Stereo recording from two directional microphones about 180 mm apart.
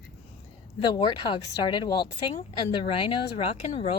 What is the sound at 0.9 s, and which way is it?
Speech, 25° left (ahead or behind).